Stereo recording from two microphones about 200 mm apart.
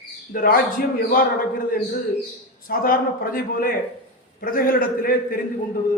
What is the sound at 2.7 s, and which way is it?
A man's voice, 45° left (ahead or behind).